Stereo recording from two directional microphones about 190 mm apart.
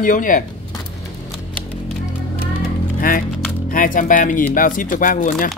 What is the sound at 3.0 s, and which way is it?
Speech, 50° left (ahead or behind).